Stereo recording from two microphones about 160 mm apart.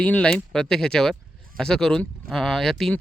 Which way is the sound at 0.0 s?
5° left (ahead or behind).